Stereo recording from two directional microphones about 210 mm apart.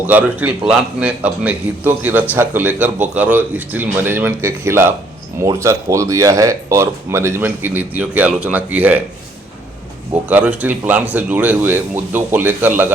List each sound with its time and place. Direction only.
0.0 s a man's voice: 10° right (ahead or behind)
10.2 s a man's voice: 5° right (ahead or behind)